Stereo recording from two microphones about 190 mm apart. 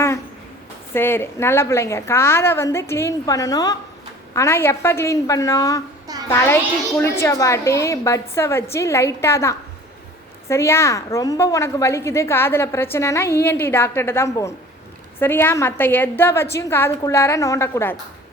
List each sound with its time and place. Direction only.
0.9 s a woman's voice: 10° left (ahead or behind)